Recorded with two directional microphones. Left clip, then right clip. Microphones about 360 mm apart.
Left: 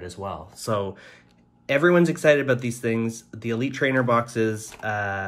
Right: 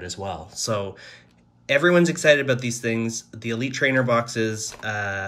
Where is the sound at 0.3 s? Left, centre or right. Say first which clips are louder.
Right 1 dB; centre.